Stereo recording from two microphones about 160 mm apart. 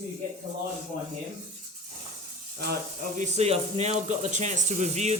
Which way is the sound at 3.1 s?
45° right (ahead or behind).